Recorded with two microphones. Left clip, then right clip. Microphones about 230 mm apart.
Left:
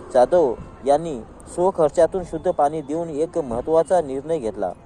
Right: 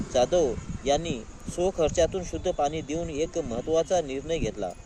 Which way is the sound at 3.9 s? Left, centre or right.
Left.